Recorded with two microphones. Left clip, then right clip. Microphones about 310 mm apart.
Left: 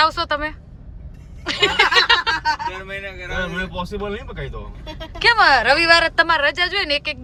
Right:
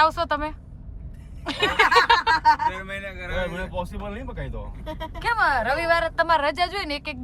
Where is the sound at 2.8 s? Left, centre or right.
Right.